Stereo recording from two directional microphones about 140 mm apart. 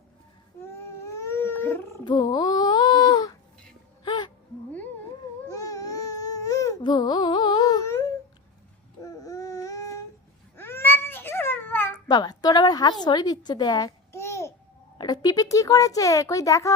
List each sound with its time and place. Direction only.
1.0 s whale vocalization: 20° left (ahead or behind)
2.0 s baby cry: 35° left (ahead or behind)
4.0 s a sound: 35° left (ahead or behind)
5.5 s baby cry: 25° left (ahead or behind)
12.0 s a woman's voice: 30° left (ahead or behind)